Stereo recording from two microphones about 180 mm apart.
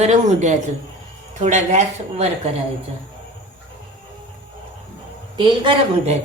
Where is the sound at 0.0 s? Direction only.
40° right (ahead or behind).